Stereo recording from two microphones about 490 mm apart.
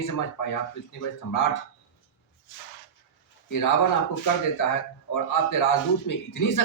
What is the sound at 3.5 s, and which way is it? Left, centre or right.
Speech, left.